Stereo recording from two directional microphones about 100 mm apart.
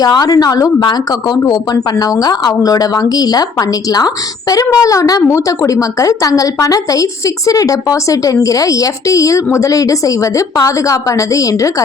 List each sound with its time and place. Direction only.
0.0 s speech: 40° left (ahead or behind)